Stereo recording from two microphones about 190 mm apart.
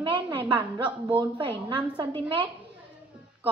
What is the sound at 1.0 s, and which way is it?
A woman's voice, 25° right (ahead or behind).